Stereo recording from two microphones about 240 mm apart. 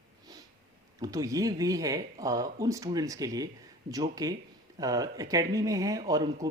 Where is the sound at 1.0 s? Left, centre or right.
Centre.